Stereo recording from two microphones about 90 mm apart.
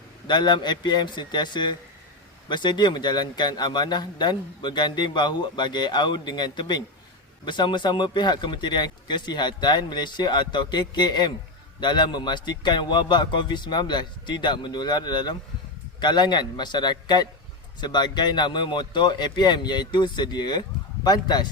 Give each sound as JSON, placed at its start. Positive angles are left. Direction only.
{"t": 0.3, "sound": "a man's voice", "side_deg": 55}